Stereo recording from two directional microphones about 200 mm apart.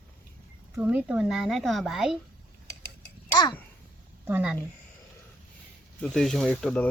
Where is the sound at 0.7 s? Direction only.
10° right (ahead or behind).